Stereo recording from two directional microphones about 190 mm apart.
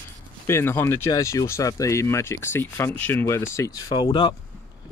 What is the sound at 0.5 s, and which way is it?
Speech, 15° left (ahead or behind).